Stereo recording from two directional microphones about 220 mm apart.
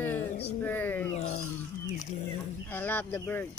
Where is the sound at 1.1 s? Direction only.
30° left (ahead or behind).